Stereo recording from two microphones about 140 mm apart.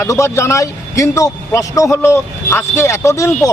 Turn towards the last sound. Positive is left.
turn(degrees=20)  # may be behind; listen again after turning